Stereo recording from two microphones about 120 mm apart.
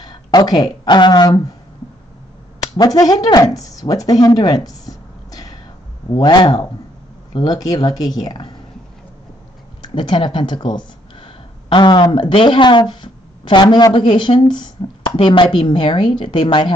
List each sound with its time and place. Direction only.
0.0 s speech: 35° left (ahead or behind)
2.8 s speech: 30° left (ahead or behind)
3.7 s a sound: 30° left (ahead or behind)
6.1 s speech: 40° left (ahead or behind)
9.8 s speech: 40° left (ahead or behind)